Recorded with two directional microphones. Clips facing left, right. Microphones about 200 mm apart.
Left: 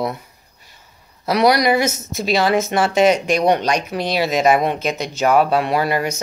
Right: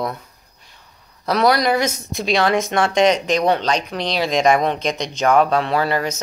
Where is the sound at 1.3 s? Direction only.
10° left (ahead or behind).